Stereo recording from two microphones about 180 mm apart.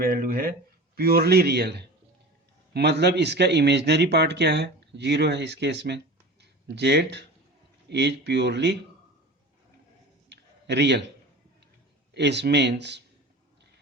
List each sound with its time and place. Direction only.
0.0 s speech: 55° right (ahead or behind); by 8.8 s 70° right (ahead or behind)
10.2 s a sound: 70° right (ahead or behind)
12.1 s speech: 70° right (ahead or behind)